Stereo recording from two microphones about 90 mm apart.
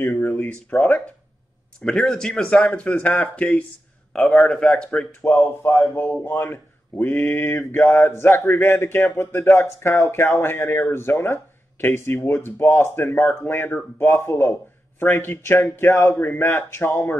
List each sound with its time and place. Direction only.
0.0 s speech: 25° left (ahead or behind)
1.8 s speech: 5° left (ahead or behind)
5.2 s speech: 35° left (ahead or behind)